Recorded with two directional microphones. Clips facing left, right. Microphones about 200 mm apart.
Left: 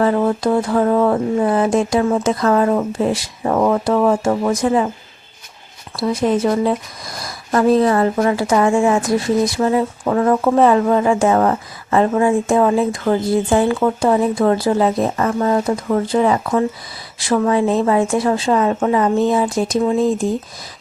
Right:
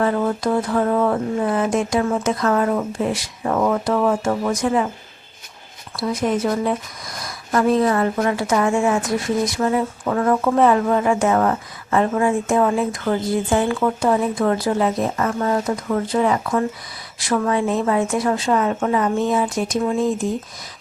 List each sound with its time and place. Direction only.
0.0 s speech: 30° left (ahead or behind)
6.0 s speech: 30° left (ahead or behind)